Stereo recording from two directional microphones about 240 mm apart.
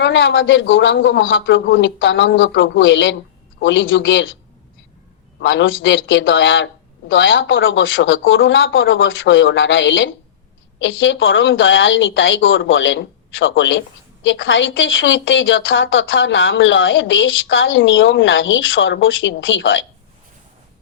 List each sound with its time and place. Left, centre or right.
0.0 s a woman's voice: left
5.4 s a woman's voice: left